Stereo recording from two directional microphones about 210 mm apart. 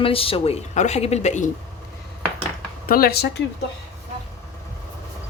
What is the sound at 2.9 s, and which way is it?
Speech, 45° left (ahead or behind).